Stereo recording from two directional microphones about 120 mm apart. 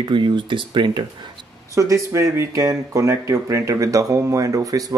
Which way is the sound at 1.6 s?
25° right (ahead or behind).